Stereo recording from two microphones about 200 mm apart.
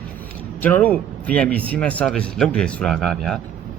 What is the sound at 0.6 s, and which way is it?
Speech, 10° left (ahead or behind).